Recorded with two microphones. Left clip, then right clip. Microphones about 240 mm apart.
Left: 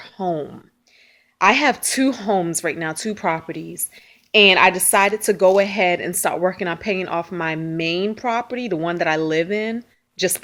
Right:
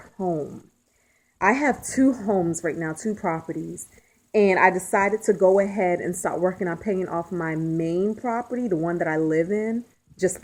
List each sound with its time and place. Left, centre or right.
0.2 s speech: left
1.6 s speech: centre
2.0 s speech: left